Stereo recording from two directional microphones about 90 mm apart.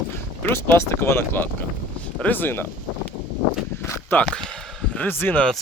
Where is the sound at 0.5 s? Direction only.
30° left (ahead or behind).